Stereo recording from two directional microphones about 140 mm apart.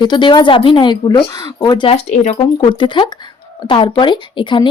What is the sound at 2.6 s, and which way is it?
Speech, 35° left (ahead or behind).